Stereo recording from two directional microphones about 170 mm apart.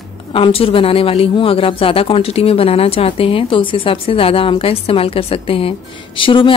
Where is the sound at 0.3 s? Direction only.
35° left (ahead or behind).